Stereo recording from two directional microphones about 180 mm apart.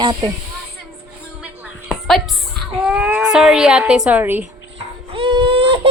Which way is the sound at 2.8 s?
5° right (ahead or behind).